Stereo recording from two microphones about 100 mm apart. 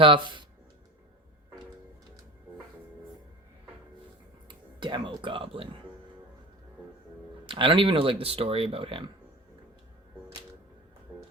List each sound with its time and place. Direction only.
0.0 s speech: 55° right (ahead or behind)
4.4 s speech: 50° right (ahead or behind); by 5.6 s 65° right (ahead or behind)
7.4 s speech: 55° right (ahead or behind)